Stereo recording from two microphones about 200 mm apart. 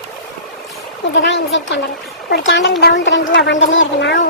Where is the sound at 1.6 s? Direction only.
65° left (ahead or behind).